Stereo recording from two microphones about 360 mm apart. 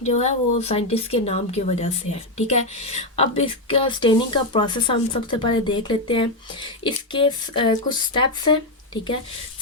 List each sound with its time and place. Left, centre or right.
0.2 s speech: centre